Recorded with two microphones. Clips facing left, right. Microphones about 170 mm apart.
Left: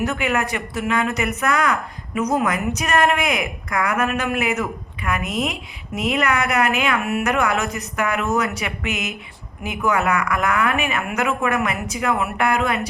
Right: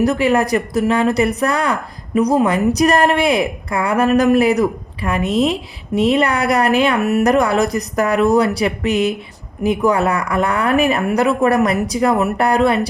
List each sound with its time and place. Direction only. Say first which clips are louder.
0.0 s speech: right 7 dB; 35° right (ahead or behind)